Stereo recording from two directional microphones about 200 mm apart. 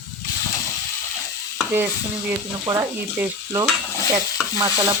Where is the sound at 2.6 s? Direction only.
15° right (ahead or behind).